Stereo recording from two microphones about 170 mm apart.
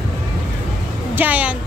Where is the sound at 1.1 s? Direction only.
10° right (ahead or behind).